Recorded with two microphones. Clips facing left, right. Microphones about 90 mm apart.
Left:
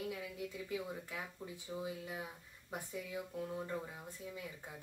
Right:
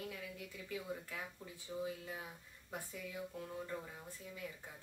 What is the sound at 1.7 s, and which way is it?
Speech, 15° left (ahead or behind).